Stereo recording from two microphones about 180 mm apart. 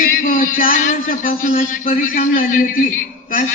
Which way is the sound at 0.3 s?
50° left (ahead or behind).